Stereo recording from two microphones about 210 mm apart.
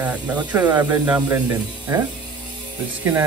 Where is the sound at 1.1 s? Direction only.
20° right (ahead or behind).